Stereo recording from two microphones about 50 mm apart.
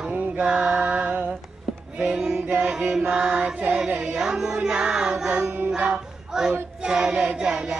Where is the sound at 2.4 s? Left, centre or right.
Right.